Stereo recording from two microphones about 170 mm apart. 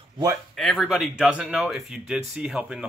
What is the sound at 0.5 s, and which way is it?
Speech, centre (ahead or behind).